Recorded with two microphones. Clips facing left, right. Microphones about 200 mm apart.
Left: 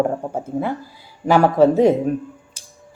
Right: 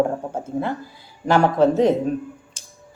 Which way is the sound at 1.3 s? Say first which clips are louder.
Left 3 dB; 10° left (ahead or behind).